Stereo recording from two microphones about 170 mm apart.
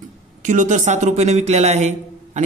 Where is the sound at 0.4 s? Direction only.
50° right (ahead or behind).